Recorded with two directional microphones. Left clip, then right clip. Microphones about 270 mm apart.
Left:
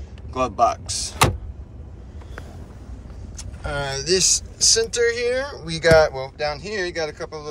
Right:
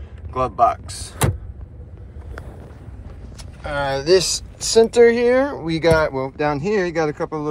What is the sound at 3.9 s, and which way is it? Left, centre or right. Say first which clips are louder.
Speech: right 3 dB; centre.